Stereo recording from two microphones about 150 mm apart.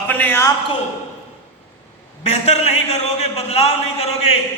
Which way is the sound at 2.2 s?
45° left (ahead or behind).